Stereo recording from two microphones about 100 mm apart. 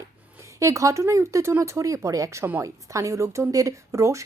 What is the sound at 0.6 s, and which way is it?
Speech, 30° right (ahead or behind).